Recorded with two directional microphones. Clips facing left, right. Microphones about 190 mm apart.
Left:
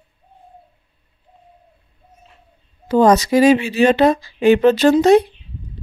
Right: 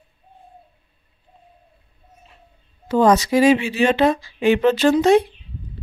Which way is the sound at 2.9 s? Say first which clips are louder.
Left 3 dB; 40° left (ahead or behind).